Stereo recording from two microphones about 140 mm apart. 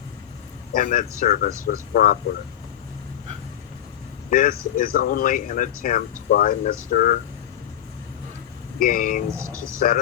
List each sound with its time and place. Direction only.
0.7 s speech: 75° left (ahead or behind)
4.3 s speech: 75° left (ahead or behind)
6.3 s speech: 90° left
6.9 s speech: 65° left (ahead or behind)
8.8 s speech: 75° left (ahead or behind)
9.3 s speech: 20° right (ahead or behind)